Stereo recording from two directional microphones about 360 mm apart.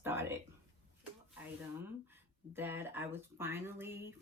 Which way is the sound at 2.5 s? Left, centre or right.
Centre.